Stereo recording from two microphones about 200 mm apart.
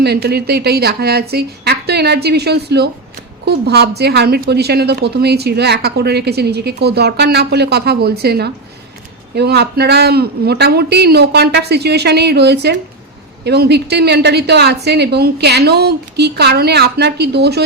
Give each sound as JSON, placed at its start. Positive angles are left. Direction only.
{"t": 0.0, "sound": "a woman's voice", "side_deg": -55}